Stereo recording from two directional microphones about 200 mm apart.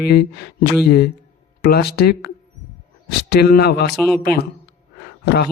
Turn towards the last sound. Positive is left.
turn(degrees=55)  # may be behind; listen again after turning